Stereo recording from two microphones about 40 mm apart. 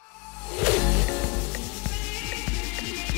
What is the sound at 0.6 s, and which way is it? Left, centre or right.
Music, centre.